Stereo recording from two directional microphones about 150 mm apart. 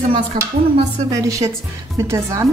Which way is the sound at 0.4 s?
30° right (ahead or behind).